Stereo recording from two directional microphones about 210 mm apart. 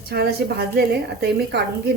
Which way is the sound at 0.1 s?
50° right (ahead or behind).